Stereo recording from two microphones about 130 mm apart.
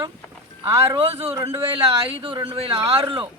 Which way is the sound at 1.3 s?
20° right (ahead or behind).